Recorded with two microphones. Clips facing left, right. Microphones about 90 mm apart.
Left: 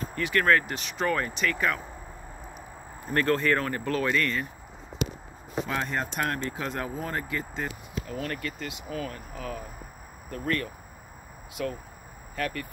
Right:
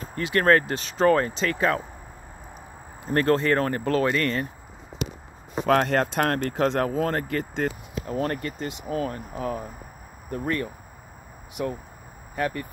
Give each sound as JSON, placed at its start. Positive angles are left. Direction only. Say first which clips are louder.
{"t": 0.1, "sound": "speech", "louder": "right 4 dB", "side_deg": -35}
{"t": 3.1, "sound": "speech", "louder": "right 3 dB", "side_deg": -35}
{"t": 5.7, "sound": "speech", "louder": "right 12 dB", "side_deg": -70}
{"t": 7.6, "sound": "speech", "louder": "right 6 dB", "side_deg": -30}